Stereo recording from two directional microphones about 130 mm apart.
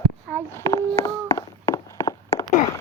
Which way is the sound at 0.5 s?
20° left (ahead or behind).